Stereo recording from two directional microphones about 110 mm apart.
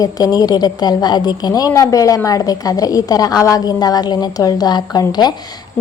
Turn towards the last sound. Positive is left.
turn(degrees=40)  # may be behind; listen again after turning